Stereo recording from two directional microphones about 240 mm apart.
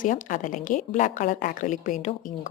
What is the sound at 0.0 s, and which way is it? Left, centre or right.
Speech, left.